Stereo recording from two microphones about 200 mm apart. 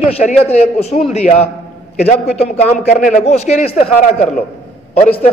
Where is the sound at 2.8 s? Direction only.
35° left (ahead or behind).